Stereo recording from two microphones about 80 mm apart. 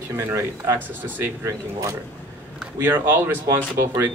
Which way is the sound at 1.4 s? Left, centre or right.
Right.